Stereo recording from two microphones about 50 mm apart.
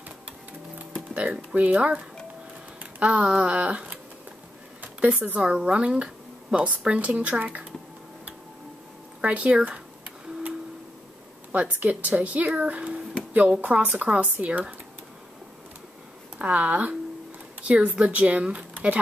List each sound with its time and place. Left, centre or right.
1.1 s speech: right
4.8 s a sound: right
5.4 s speech: right
9.2 s a sound: right
11.5 s speech: right
14.3 s speech: right
16.3 s speech: right